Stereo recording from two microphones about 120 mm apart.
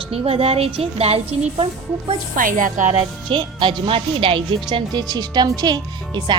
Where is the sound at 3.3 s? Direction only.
45° right (ahead or behind).